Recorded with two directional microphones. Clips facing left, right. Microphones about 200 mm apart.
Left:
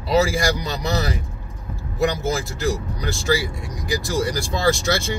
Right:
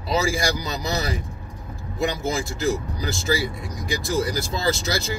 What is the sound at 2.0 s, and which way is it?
Speech, centre (ahead or behind).